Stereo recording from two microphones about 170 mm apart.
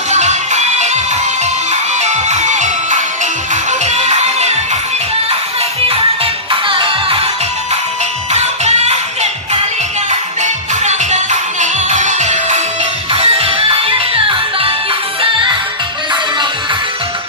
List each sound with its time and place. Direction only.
0.1 s music: 45° right (ahead or behind)
6.5 s music: 30° right (ahead or behind)
8.3 s music: 40° right (ahead or behind)